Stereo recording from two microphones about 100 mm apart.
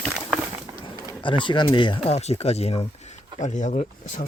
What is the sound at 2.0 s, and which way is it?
Speech, 90° left.